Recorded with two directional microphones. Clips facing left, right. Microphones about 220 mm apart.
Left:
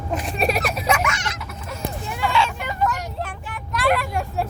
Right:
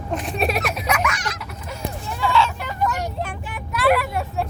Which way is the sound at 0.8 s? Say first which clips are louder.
Left 1 dB; 25° left (ahead or behind).